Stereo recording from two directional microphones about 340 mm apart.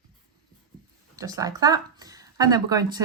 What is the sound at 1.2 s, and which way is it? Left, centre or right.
Speech, centre.